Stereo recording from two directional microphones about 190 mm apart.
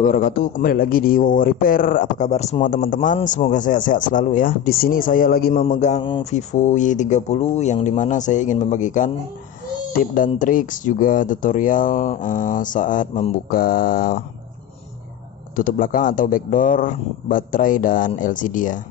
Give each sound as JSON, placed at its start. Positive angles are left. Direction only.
{"t": 0.0, "sound": "a man's voice", "side_deg": 45}
{"t": 10.1, "sound": "a man's voice", "side_deg": 45}
{"t": 15.5, "sound": "a man's voice", "side_deg": 45}